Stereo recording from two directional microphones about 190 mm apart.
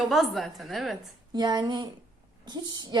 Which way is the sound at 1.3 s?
20° right (ahead or behind).